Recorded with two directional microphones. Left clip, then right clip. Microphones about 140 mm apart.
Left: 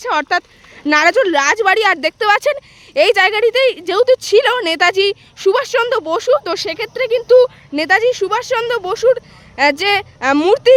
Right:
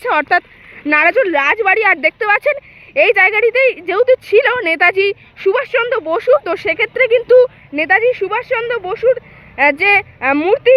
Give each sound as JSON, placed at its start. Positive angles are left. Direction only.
{"t": 0.0, "sound": "speech", "side_deg": 30}
{"t": 9.6, "sound": "speech", "side_deg": 40}